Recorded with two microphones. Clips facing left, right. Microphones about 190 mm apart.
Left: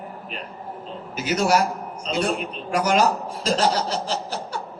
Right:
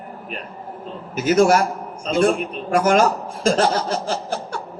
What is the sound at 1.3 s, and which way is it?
A man's voice, 50° right (ahead or behind).